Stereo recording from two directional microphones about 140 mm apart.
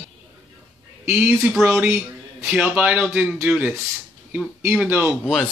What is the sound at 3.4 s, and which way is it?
Speech, 10° right (ahead or behind).